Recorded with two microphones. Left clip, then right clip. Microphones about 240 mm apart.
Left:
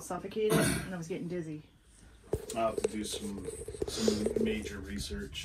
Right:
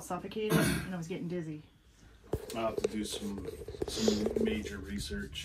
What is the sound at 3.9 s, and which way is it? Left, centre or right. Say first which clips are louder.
Speech: even; right.